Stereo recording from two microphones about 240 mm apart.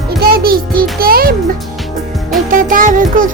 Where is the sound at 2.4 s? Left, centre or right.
Right.